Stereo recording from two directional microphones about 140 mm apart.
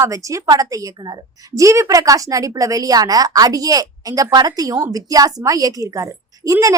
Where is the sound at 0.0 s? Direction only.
25° right (ahead or behind).